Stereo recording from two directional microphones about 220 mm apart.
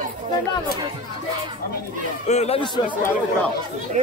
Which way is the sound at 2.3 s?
30° left (ahead or behind).